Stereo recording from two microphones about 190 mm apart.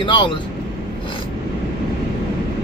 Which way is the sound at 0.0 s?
25° left (ahead or behind).